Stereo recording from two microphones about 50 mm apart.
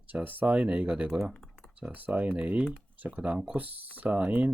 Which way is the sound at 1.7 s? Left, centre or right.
Right.